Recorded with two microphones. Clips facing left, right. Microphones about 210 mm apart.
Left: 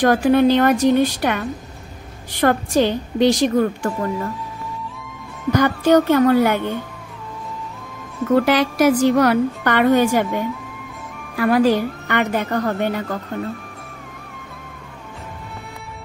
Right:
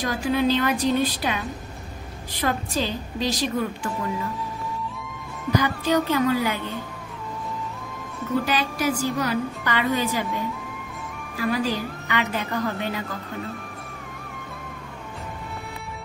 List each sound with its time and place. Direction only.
0.0 s a woman's voice: 60° left (ahead or behind)
1.0 s a woman's voice: 65° left (ahead or behind)
5.9 s a woman's voice: 55° left (ahead or behind)
8.3 s a woman's voice: 75° left (ahead or behind); by 13.2 s 50° left (ahead or behind)